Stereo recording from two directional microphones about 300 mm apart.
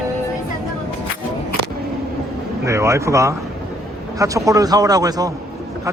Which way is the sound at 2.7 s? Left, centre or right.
Centre.